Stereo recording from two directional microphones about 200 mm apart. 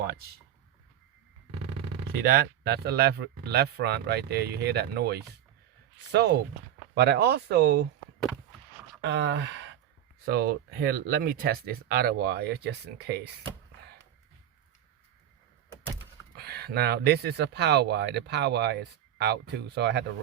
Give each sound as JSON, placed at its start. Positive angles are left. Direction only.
{"t": 2.1, "sound": "speech", "side_deg": -50}
{"t": 9.0, "sound": "speech", "side_deg": -60}
{"t": 10.2, "sound": "speech", "side_deg": -50}
{"t": 16.3, "sound": "speech", "side_deg": -50}